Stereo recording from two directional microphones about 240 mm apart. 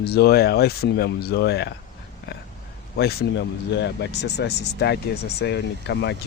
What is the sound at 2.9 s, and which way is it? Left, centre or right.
Speech, left.